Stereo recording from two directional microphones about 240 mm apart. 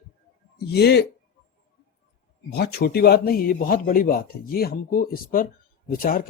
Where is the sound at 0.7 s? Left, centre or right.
Left.